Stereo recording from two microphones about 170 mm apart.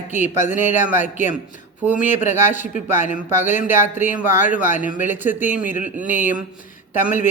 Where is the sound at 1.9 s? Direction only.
45° left (ahead or behind).